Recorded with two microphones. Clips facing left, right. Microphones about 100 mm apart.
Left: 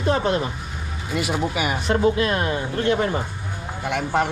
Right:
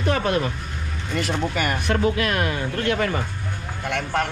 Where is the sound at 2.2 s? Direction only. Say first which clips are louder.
Left 1 dB; 25° left (ahead or behind).